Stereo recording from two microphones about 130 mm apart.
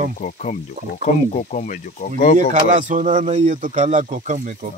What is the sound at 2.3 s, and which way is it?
Speech, 70° right (ahead or behind).